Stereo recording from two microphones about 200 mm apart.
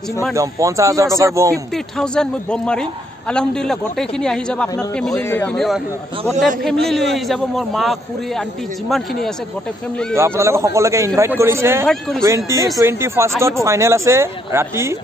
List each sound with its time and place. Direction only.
0.3 s a man's voice: 15° right (ahead or behind)
2.0 s a man's voice: 5° left (ahead or behind)
10.1 s a man's voice: 15° right (ahead or behind)